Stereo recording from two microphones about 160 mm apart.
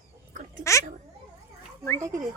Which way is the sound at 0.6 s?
20° left (ahead or behind).